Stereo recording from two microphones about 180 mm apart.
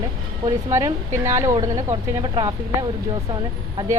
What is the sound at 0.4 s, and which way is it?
A woman's voice, 20° right (ahead or behind).